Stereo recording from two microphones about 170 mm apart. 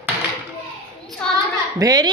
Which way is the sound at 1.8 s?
25° right (ahead or behind).